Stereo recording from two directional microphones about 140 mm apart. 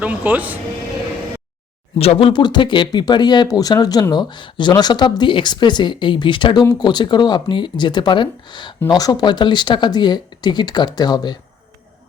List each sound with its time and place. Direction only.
0.0 s speech: 10° right (ahead or behind)
2.0 s speech: 45° left (ahead or behind)